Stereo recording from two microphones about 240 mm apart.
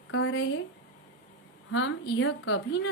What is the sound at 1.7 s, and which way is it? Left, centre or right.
A woman's voice, left.